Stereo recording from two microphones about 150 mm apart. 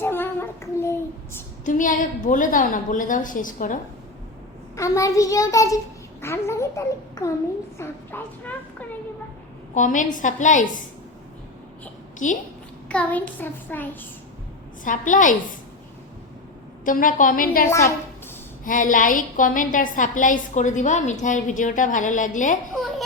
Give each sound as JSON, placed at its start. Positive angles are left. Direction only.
{"t": 0.0, "sound": "child singing", "side_deg": 15}
{"t": 1.6, "sound": "a woman's voice", "side_deg": 60}
{"t": 4.8, "sound": "a child's voice", "side_deg": 20}
{"t": 9.7, "sound": "a woman's voice", "side_deg": 60}
{"t": 12.2, "sound": "a woman's voice", "side_deg": 60}
{"t": 12.9, "sound": "a child's voice", "side_deg": 10}
{"t": 14.8, "sound": "a woman's voice", "side_deg": 60}
{"t": 16.8, "sound": "a woman's voice", "side_deg": 65}
{"t": 17.7, "sound": "a child's voice", "side_deg": 20}
{"t": 18.6, "sound": "a woman's voice", "side_deg": 65}